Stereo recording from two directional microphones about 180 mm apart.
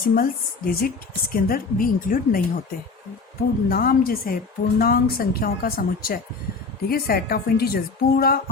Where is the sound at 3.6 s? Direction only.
55° left (ahead or behind).